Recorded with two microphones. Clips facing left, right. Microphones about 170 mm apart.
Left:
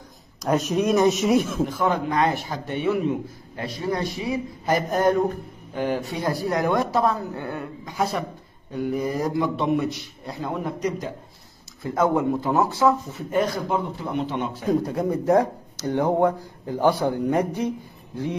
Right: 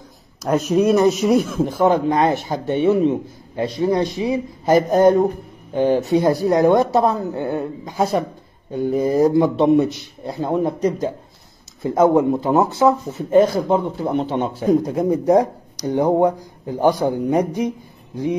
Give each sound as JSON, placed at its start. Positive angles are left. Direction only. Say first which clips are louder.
{"t": 0.4, "sound": "speech", "louder": "right 5 dB", "side_deg": 0}
{"t": 1.9, "sound": "a man's voice", "louder": "right 6 dB", "side_deg": -25}
{"t": 5.8, "sound": "a man's voice", "louder": "right 9 dB", "side_deg": -25}
{"t": 14.7, "sound": "speech", "louder": "right 5 dB", "side_deg": -15}